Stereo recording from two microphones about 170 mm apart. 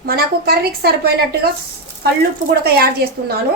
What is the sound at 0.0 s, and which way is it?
A woman's voice, 65° right (ahead or behind).